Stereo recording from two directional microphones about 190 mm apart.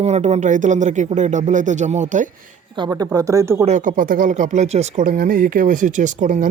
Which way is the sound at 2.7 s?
25° right (ahead or behind).